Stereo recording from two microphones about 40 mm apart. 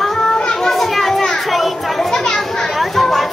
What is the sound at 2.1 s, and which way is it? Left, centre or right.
Children playing, centre.